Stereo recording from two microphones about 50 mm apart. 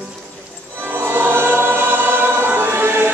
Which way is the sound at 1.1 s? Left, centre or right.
Right.